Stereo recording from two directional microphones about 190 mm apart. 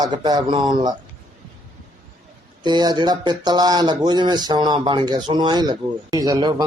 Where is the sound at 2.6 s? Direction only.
20° right (ahead or behind).